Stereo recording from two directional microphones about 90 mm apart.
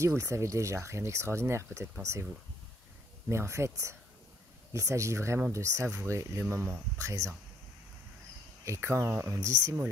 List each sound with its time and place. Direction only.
0.0 s speech: 35° right (ahead or behind)
3.3 s speech: 30° right (ahead or behind)
8.6 s speech: 30° right (ahead or behind)